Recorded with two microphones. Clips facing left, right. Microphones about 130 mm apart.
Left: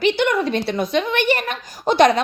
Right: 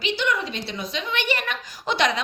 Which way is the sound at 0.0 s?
55° left (ahead or behind).